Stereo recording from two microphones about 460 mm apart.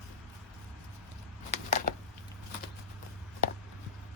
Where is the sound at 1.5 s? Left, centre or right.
Centre.